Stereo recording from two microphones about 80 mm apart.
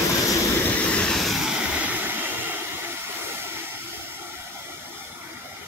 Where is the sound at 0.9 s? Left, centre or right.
Centre.